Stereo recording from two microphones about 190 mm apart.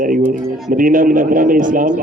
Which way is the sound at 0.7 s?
45° right (ahead or behind).